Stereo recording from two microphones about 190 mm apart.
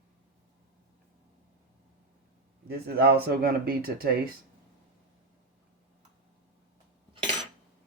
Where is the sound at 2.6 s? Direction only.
55° right (ahead or behind).